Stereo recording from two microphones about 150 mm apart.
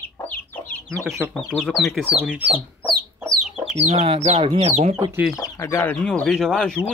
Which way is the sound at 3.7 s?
45° right (ahead or behind).